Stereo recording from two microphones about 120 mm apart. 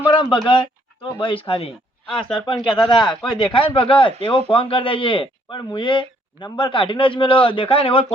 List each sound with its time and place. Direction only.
0.1 s a sound: 45° left (ahead or behind)
1.2 s a man's voice: 50° left (ahead or behind)
2.0 s speech: 5° left (ahead or behind)
2.9 s a man's voice: 40° left (ahead or behind)